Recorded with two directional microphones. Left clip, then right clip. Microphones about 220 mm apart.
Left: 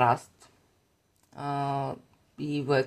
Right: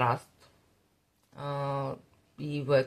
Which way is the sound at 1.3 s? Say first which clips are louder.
Left 3 dB; 45° left (ahead or behind).